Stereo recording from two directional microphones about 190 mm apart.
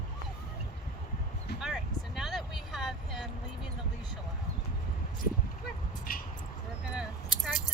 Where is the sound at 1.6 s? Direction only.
Centre (ahead or behind).